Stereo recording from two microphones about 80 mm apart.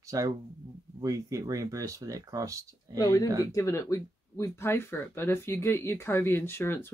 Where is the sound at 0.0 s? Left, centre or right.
Right.